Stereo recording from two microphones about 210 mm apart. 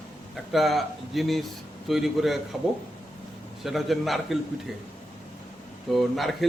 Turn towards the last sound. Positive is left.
turn(degrees=0)  # may be behind; listen again after turning